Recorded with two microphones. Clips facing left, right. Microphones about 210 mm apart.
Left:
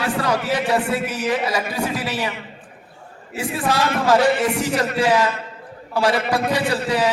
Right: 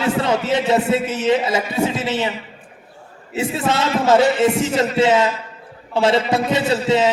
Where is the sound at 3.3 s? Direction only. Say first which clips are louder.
Right 2 dB; 25° right (ahead or behind).